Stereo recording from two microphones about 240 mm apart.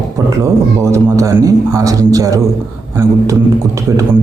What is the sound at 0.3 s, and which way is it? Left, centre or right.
Speech, centre.